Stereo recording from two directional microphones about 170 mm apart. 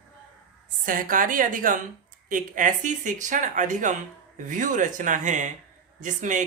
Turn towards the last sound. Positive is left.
turn(degrees=-45)  # may be behind; listen again after turning